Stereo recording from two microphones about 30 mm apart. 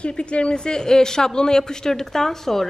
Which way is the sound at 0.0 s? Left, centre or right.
Left.